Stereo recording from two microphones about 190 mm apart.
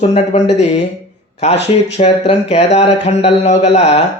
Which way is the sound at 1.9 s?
35° left (ahead or behind).